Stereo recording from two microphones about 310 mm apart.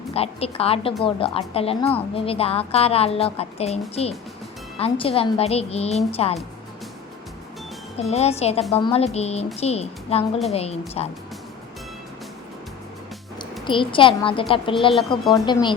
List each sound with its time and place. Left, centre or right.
0.1 s a woman's voice: centre
7.9 s a woman's voice: left
13.7 s a woman's voice: centre